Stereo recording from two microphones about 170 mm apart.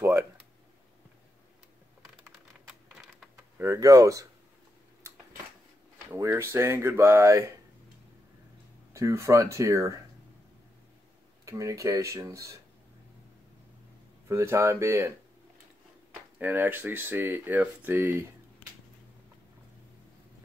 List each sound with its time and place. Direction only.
2.9 s typing: centre (ahead or behind)
3.5 s speech: 20° right (ahead or behind)
5.1 s a sound: 15° right (ahead or behind)
6.1 s speech: 15° right (ahead or behind)
8.9 s speech: 15° right (ahead or behind)
11.4 s speech: 20° right (ahead or behind)
14.3 s speech: 15° right (ahead or behind)
16.3 s speech: 10° right (ahead or behind)